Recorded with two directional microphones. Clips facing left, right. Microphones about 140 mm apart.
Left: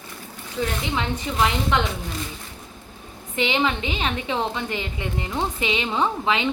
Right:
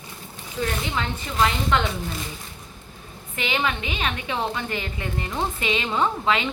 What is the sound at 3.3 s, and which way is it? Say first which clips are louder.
A woman's voice: left 3 dB; 25° left (ahead or behind).